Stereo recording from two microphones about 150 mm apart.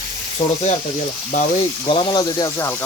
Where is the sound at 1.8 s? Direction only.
35° left (ahead or behind).